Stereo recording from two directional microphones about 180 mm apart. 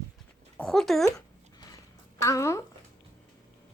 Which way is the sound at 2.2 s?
15° left (ahead or behind).